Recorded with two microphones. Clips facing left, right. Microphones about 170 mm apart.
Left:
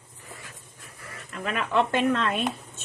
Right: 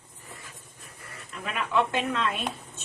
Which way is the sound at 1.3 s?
50° left (ahead or behind).